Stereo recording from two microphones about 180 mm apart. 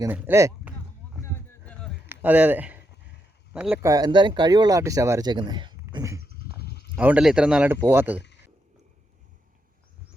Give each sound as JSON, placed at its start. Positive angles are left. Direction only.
{"t": 0.0, "sound": "speech", "side_deg": -10}
{"t": 1.2, "sound": "a sound", "side_deg": 15}
{"t": 2.0, "sound": "speech", "side_deg": -10}
{"t": 3.8, "sound": "speech", "side_deg": -20}
{"t": 5.9, "sound": "dog", "side_deg": -15}
{"t": 6.3, "sound": "a sound", "side_deg": 60}
{"t": 6.9, "sound": "speech", "side_deg": -5}